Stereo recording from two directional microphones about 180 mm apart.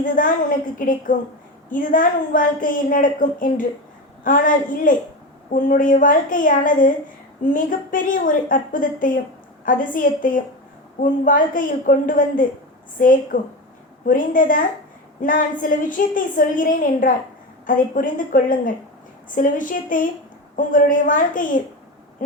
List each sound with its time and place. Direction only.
0.2 s a woman's voice: 50° left (ahead or behind)